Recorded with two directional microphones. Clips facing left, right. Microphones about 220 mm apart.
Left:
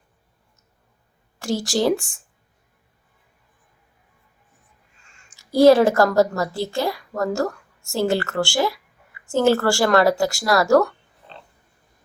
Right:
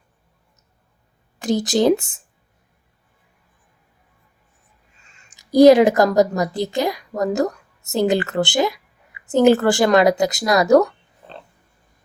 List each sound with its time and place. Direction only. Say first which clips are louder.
1.4 s speech: right 4 dB; 20° right (ahead or behind)
5.3 s speech: right 3 dB; 20° right (ahead or behind)